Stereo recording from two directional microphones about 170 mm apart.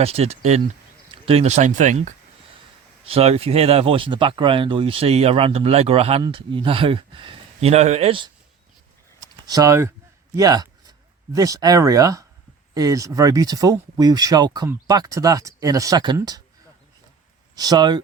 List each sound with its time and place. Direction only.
0.0 s speech: 35° right (ahead or behind)
9.2 s a sound: 20° right (ahead or behind)
10.3 s speech: 20° right (ahead or behind)
17.5 s speech: 25° right (ahead or behind)